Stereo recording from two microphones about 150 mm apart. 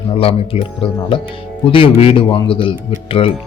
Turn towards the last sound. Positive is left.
turn(degrees=40)  # may be behind; listen again after turning